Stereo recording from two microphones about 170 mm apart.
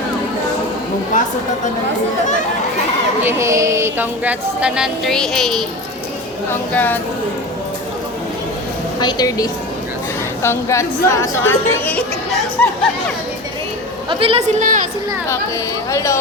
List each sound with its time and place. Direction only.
3.2 s music: 15° right (ahead or behind); by 5.6 s centre (ahead or behind)
6.7 s speech: 10° left (ahead or behind)
9.0 s a woman's voice: 25° left (ahead or behind)
14.1 s a woman's voice: 35° right (ahead or behind); by 14.8 s 50° right (ahead or behind)
15.9 s a woman's voice: 20° left (ahead or behind)